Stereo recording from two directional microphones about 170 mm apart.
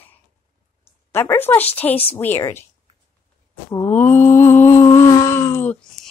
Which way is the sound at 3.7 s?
15° left (ahead or behind).